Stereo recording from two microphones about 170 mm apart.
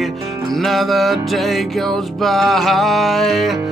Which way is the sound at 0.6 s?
Centre (ahead or behind).